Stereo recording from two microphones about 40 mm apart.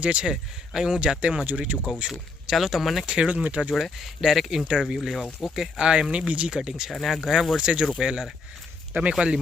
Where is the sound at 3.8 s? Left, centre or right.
Centre.